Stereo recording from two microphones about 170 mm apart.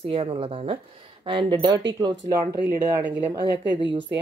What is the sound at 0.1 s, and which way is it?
Speech, 35° right (ahead or behind).